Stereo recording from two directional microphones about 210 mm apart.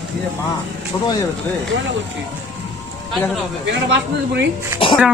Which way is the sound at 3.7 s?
55° right (ahead or behind).